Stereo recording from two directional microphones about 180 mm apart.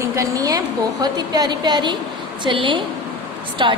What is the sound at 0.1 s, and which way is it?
A woman's voice, 20° right (ahead or behind).